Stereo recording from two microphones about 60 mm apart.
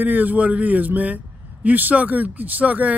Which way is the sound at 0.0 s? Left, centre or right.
Right.